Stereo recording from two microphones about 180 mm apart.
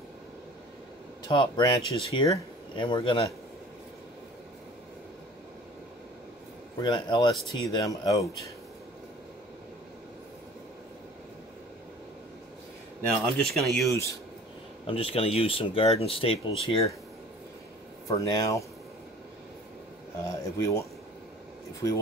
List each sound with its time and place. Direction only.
1.2 s speech: 25° left (ahead or behind)
6.8 s speech: 25° left (ahead or behind)
13.2 s speech: centre (ahead or behind)
13.8 s speech: 15° left (ahead or behind)
14.9 s speech: 30° left (ahead or behind)
18.0 s speech: 20° left (ahead or behind)
20.5 s speech: 15° left (ahead or behind)